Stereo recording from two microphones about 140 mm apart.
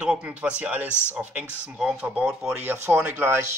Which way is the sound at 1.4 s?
15° left (ahead or behind).